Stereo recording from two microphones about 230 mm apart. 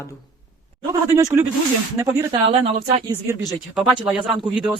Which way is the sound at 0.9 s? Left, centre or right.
Centre.